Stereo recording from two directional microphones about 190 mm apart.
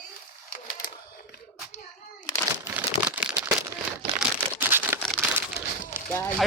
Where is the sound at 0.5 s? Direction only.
45° left (ahead or behind).